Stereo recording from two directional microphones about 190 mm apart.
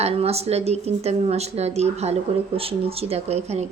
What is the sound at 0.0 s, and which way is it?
A woman's voice, 30° right (ahead or behind).